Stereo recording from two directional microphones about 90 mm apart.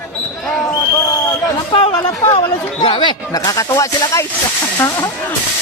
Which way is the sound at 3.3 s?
40° left (ahead or behind).